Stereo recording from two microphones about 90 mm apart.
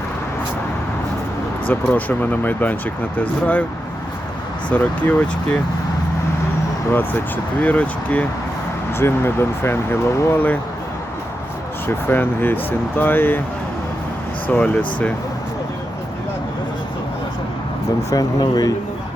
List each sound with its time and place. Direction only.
1.6 s speech: 20° left (ahead or behind)
4.7 s speech: 15° left (ahead or behind)
7.6 s speech: 15° left (ahead or behind)
8.9 s speech: 25° left (ahead or behind)
11.9 s speech: 25° left (ahead or behind)
14.4 s speech: 15° left (ahead or behind)
18.1 s speech: 45° left (ahead or behind)